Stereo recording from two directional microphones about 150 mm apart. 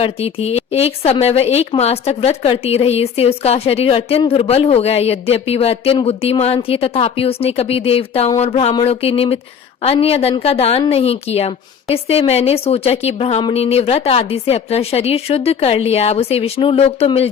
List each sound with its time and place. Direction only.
0.0 s speech: 40° left (ahead or behind)
8.4 s a sound: 45° left (ahead or behind)
8.8 s speech: 40° left (ahead or behind)